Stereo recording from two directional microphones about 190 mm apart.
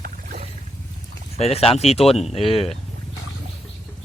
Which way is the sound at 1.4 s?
35° left (ahead or behind).